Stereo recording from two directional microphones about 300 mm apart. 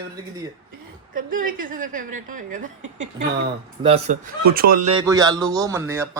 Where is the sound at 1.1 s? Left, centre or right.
Right.